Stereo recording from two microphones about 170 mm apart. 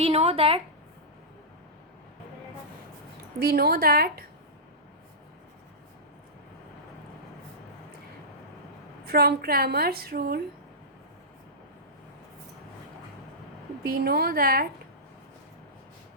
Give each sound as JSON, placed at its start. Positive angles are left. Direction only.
{"t": 0.0, "sound": "speech", "side_deg": -35}
{"t": 3.4, "sound": "a woman's voice", "side_deg": -65}
{"t": 9.0, "sound": "a woman's voice", "side_deg": -65}
{"t": 13.8, "sound": "a woman's voice", "side_deg": -65}